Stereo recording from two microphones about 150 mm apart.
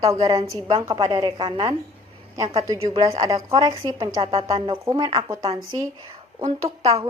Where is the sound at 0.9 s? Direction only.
35° right (ahead or behind).